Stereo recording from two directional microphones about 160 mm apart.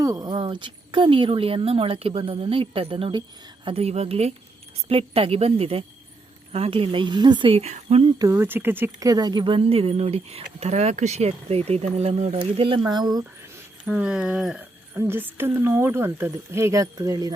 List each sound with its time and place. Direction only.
0.0 s speech: 25° right (ahead or behind); by 8.0 s 45° right (ahead or behind)
8.0 s speech: 20° right (ahead or behind)
13.8 s speech: 5° right (ahead or behind); by 17.3 s 20° right (ahead or behind)